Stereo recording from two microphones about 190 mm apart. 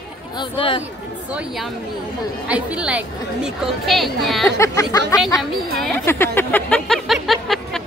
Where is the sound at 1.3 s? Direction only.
5° right (ahead or behind).